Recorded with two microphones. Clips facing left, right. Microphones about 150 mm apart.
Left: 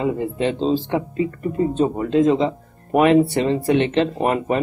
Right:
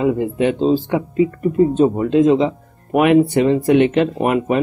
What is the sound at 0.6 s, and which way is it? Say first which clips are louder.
Speech: right 4 dB; 10° right (ahead or behind).